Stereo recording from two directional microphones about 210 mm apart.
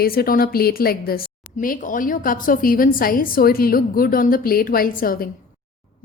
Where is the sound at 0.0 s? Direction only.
45° left (ahead or behind).